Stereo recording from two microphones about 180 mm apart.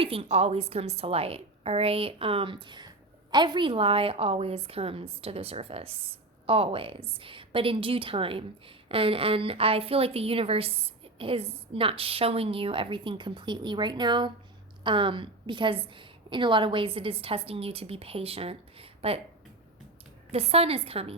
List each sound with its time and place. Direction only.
0.0 s a woman's voice: 30° right (ahead or behind)
20.3 s a woman's voice: 35° right (ahead or behind)